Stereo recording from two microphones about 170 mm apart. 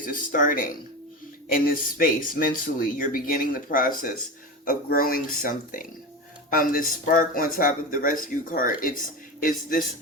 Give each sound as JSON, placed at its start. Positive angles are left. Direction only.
{"t": 0.0, "sound": "speech", "side_deg": 50}